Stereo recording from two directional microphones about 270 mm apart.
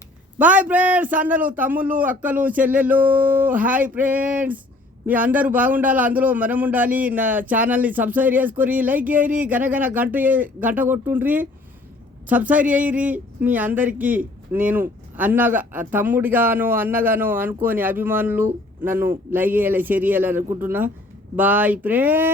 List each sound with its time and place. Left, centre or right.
0.3 s speech: centre